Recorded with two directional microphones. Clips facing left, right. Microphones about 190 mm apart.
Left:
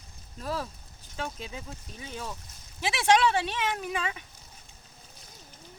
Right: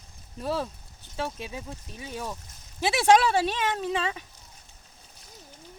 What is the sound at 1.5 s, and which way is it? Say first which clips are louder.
Speech: right 3 dB; 20° right (ahead or behind).